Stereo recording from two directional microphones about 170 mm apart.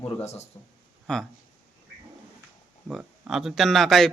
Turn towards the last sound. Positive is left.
turn(degrees=0)  # may be behind; listen again after turning